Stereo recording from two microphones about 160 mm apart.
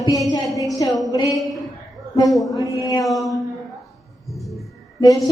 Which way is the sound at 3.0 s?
Centre (ahead or behind).